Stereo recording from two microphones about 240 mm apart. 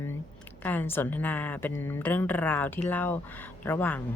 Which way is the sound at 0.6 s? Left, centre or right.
Centre.